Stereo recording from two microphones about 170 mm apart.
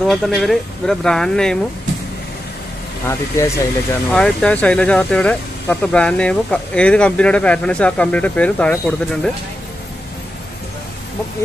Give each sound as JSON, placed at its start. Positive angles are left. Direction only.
{"t": 0.0, "sound": "speech", "side_deg": 0}
{"t": 3.1, "sound": "speech", "side_deg": 15}
{"t": 4.1, "sound": "speech", "side_deg": 5}